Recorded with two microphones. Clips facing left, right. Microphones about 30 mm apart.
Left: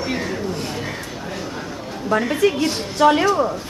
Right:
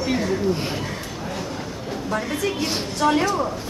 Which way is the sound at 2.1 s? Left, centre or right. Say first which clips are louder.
Left 7 dB; left.